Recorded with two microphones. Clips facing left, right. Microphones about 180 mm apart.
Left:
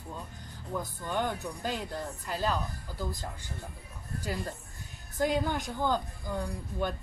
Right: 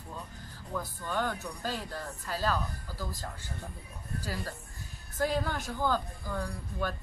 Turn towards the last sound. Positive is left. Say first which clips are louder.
# left 2 dB
turn(degrees=20)  # may be behind; listen again after turning